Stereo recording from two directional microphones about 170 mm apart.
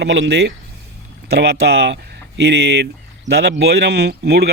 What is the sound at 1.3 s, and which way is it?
A man's voice, 75° right (ahead or behind).